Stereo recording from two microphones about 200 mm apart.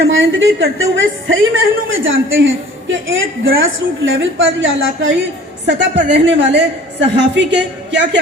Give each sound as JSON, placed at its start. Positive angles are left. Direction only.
{"t": 0.0, "sound": "a woman's voice", "side_deg": -70}
{"t": 5.6, "sound": "a woman's voice", "side_deg": -60}